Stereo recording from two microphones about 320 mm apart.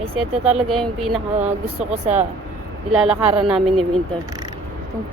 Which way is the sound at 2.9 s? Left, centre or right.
Centre.